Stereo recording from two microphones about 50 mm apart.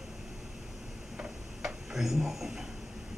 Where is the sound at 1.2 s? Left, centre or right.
Centre.